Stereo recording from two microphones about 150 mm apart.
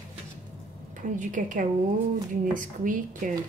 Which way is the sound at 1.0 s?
60° right (ahead or behind).